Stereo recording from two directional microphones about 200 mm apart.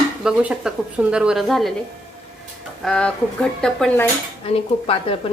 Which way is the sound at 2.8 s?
5° left (ahead or behind).